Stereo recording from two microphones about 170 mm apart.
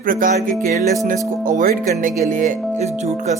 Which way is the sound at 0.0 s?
55° right (ahead or behind).